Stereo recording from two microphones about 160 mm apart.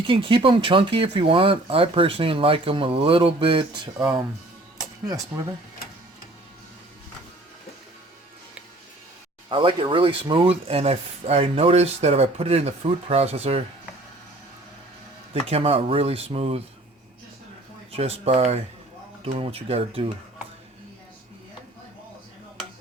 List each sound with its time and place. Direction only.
0.1 s speech: 35° right (ahead or behind)
9.5 s speech: 30° right (ahead or behind)
15.3 s speech: 40° right (ahead or behind)
17.9 s speech: 40° right (ahead or behind)